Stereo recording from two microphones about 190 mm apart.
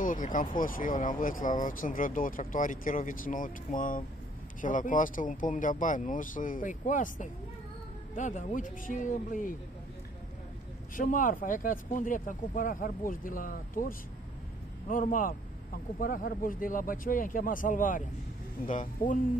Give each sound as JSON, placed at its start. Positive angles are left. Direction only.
{"t": 0.0, "sound": "speech", "side_deg": 45}
{"t": 11.0, "sound": "speech", "side_deg": 45}